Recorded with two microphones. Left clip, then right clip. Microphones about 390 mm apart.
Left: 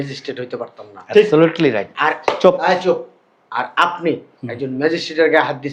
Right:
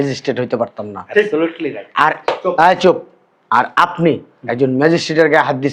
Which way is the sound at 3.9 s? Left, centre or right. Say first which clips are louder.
Right 5 dB; right.